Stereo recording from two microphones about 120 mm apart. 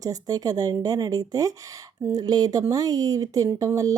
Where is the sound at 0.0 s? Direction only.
30° right (ahead or behind).